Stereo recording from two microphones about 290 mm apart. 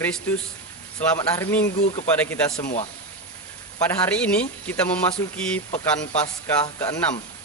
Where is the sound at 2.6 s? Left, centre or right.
Left.